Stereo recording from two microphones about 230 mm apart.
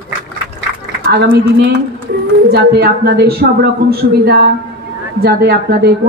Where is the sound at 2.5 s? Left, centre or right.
Right.